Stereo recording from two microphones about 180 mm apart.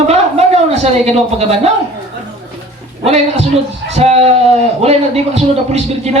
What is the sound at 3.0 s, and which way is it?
A man's voice, 35° right (ahead or behind).